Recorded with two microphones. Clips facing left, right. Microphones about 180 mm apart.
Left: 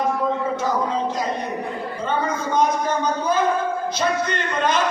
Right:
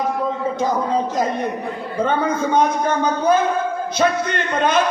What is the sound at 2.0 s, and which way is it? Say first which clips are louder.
A man's voice: right 3 dB; 55° right (ahead or behind).